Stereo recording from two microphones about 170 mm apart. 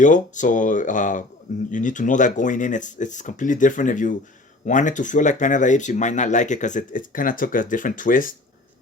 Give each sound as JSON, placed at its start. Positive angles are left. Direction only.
{"t": 0.0, "sound": "speech", "side_deg": 45}